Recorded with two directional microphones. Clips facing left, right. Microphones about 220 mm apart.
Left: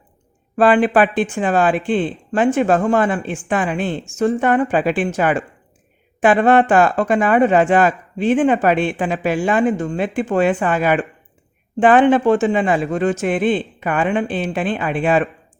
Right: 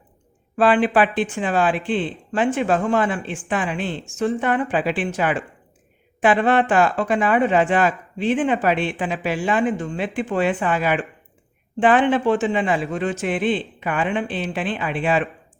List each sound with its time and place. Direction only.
0.5 s speech: 45° left (ahead or behind)